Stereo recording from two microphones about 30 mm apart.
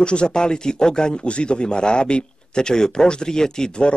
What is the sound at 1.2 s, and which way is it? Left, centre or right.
Speech, left.